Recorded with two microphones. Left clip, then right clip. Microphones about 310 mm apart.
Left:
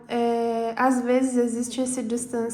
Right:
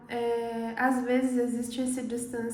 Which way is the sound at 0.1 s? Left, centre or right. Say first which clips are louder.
Left 6 dB; centre.